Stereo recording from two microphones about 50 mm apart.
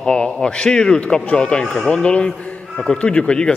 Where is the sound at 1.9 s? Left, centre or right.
Centre.